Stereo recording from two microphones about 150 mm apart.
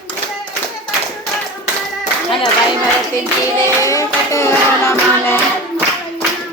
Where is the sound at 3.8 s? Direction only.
20° left (ahead or behind).